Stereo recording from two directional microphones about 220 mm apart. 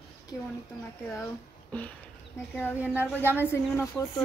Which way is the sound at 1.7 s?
5° left (ahead or behind).